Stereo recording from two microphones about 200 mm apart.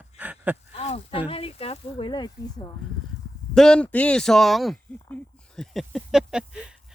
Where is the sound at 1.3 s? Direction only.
30° left (ahead or behind).